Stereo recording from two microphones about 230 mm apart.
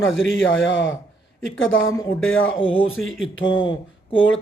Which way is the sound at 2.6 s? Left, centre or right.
Left.